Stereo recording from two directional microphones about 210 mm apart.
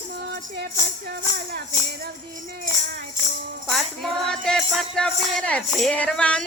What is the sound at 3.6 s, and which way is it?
Music, centre (ahead or behind).